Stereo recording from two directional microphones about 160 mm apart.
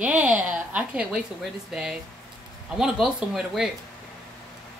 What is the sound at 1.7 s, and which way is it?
Speech, 5° right (ahead or behind).